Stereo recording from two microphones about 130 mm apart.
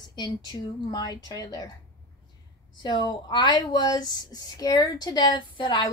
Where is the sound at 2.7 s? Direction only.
35° left (ahead or behind).